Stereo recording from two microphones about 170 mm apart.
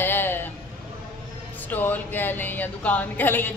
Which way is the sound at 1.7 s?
10° left (ahead or behind).